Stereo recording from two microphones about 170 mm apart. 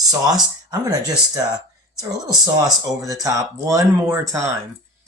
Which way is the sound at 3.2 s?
20° right (ahead or behind).